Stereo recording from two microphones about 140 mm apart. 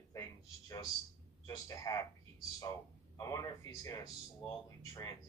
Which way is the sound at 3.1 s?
20° left (ahead or behind).